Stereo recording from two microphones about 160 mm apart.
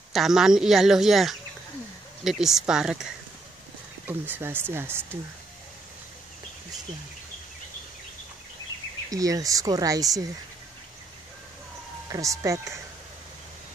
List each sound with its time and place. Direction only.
0.1 s speech: centre (ahead or behind)
4.1 s speech: 15° right (ahead or behind)
9.1 s speech: 20° right (ahead or behind)
12.1 s speech: 20° right (ahead or behind)